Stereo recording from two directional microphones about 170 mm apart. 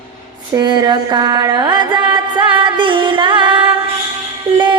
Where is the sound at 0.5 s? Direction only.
25° right (ahead or behind).